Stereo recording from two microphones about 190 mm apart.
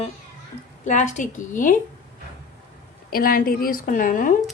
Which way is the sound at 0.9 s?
40° left (ahead or behind).